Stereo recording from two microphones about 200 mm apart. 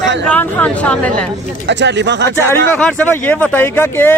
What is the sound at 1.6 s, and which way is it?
Speech, 60° right (ahead or behind).